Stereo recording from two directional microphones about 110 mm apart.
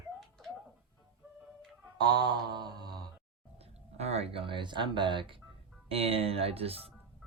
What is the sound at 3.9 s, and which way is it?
Speech, 70° right (ahead or behind).